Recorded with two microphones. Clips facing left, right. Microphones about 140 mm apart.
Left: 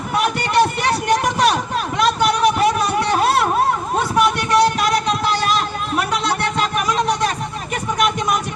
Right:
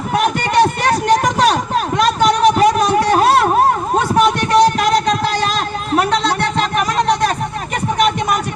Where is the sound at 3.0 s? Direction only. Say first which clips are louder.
Right 5 dB; 50° right (ahead or behind).